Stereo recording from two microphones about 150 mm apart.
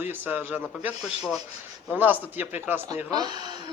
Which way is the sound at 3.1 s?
25° right (ahead or behind).